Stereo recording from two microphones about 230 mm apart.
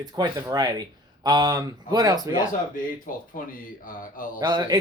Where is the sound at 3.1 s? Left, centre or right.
Left.